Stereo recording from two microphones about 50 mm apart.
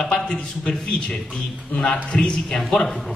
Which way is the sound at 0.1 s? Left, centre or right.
Centre.